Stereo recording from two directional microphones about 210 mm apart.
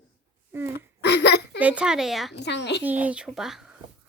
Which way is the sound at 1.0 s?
55° left (ahead or behind).